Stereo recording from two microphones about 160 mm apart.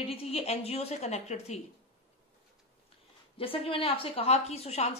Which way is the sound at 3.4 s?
35° left (ahead or behind).